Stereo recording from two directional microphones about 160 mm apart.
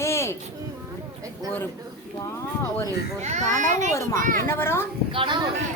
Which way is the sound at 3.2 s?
50° right (ahead or behind).